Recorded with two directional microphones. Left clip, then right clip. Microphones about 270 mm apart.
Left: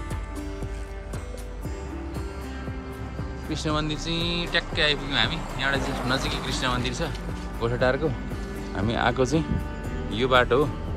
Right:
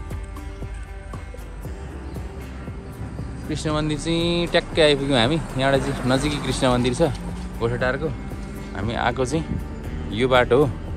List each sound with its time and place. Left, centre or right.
3.4 s speech: centre
7.6 s speech: centre